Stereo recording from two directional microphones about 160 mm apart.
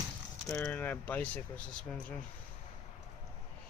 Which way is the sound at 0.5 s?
10° left (ahead or behind).